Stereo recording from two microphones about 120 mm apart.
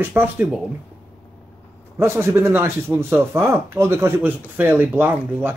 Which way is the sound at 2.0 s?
25° right (ahead or behind).